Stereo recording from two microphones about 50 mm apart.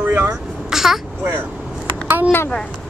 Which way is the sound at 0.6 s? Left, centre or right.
Centre.